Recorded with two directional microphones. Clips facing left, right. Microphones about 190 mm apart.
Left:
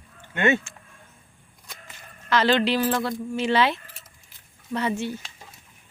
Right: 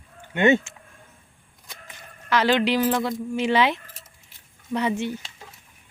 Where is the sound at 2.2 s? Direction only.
10° right (ahead or behind).